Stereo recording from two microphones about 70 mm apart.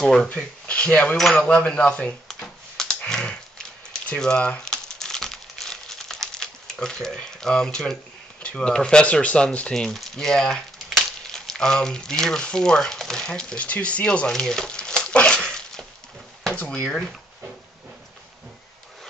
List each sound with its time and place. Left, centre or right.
0.0 s speech: centre
0.3 s speech: centre
1.1 s speech: centre
3.1 s a sound: centre
16.5 s speech: centre